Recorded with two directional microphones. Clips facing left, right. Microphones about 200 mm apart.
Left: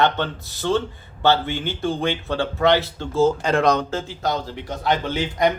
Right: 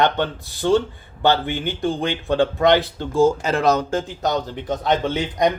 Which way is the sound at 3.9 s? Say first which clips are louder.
Right 3 dB; 15° right (ahead or behind).